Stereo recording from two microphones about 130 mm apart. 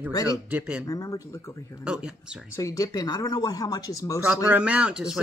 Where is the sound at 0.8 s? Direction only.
25° left (ahead or behind).